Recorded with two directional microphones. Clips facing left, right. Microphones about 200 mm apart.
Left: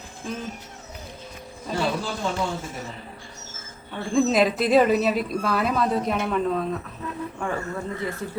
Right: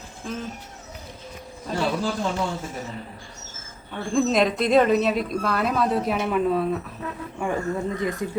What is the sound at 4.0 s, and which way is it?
Speech, centre (ahead or behind).